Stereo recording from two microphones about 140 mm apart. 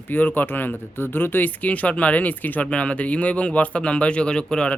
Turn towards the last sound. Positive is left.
turn(degrees=5)  # may be behind; listen again after turning